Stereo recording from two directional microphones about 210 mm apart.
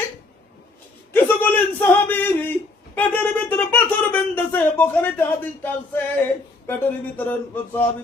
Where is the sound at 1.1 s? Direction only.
10° left (ahead or behind).